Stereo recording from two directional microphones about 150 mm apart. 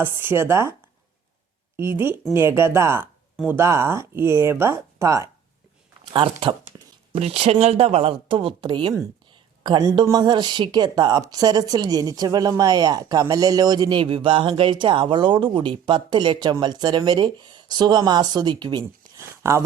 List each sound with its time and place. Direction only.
0.0 s speech: 15° right (ahead or behind)
1.7 s speech: 15° right (ahead or behind)
6.1 s a woman's voice: 35° right (ahead or behind); by 19.6 s 15° right (ahead or behind)